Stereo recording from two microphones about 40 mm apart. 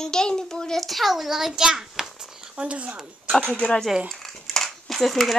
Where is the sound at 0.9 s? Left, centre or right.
Centre.